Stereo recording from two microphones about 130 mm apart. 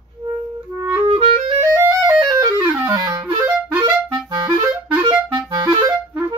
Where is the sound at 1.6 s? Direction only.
25° right (ahead or behind).